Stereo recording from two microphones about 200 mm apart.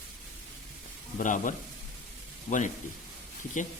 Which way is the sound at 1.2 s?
40° left (ahead or behind).